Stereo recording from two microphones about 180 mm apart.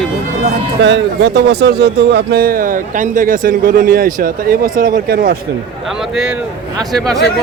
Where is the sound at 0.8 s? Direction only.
80° right; by 5.4 s 60° right (ahead or behind).